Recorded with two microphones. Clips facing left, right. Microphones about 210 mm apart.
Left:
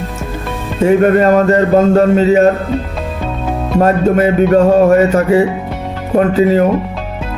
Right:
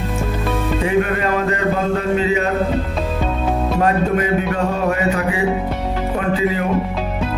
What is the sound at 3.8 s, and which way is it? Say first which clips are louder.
Speech: left 9 dB; 45° left (ahead or behind).